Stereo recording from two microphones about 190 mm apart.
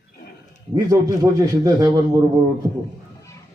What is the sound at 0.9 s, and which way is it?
A man's voice, 15° right (ahead or behind).